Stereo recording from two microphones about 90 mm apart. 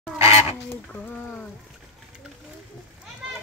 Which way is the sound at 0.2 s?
30° right (ahead or behind).